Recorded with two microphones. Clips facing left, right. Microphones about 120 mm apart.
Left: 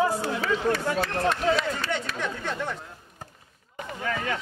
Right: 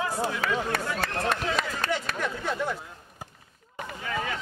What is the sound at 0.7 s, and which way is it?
Speech, 55° right (ahead or behind).